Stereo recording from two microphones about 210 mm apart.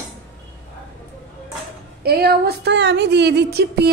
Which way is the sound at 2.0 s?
45° right (ahead or behind).